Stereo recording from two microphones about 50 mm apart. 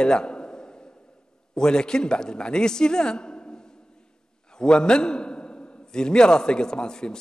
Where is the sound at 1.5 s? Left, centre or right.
Centre.